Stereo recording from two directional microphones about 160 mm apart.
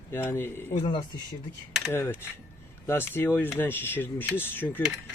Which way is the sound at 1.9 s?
15° left (ahead or behind).